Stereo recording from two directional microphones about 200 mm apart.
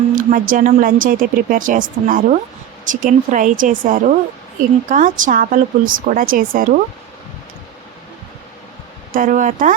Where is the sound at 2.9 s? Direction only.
40° right (ahead or behind).